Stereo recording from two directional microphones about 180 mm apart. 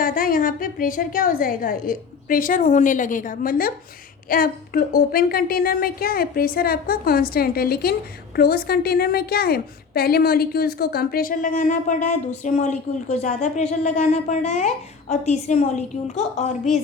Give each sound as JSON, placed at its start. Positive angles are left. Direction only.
{"t": 0.0, "sound": "a woman's voice", "side_deg": 50}